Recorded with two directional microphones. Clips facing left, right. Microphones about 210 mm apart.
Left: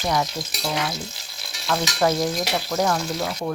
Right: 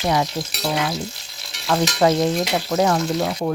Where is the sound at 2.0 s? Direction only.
20° right (ahead or behind).